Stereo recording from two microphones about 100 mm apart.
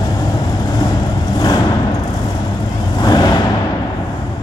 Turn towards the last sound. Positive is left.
turn(degrees=40)  # may be behind; listen again after turning